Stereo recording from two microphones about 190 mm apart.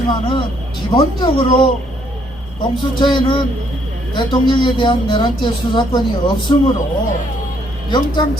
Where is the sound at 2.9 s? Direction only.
25° left (ahead or behind).